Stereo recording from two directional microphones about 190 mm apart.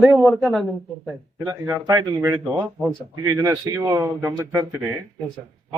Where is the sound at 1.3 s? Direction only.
15° right (ahead or behind).